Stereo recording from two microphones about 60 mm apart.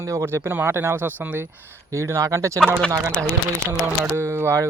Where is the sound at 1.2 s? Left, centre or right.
Right.